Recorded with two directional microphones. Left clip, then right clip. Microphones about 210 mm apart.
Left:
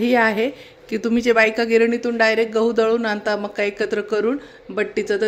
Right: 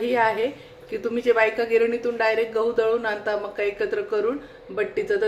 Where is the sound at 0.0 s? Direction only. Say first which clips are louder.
Left 4 dB; 55° left (ahead or behind).